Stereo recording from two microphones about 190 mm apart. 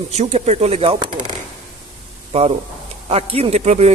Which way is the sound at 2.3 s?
30° right (ahead or behind).